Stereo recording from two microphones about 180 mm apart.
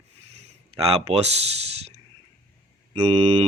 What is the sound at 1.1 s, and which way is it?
Speech, 35° right (ahead or behind).